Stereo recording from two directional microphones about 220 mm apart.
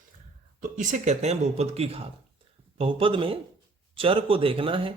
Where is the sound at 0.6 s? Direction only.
35° right (ahead or behind).